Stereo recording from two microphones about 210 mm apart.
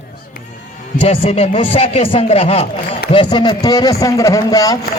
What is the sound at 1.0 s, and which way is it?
A man's voice, 30° left (ahead or behind).